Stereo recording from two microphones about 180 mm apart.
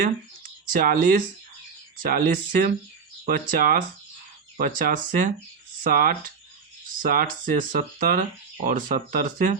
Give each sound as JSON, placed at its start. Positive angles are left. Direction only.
{"t": 0.7, "sound": "speech", "side_deg": -50}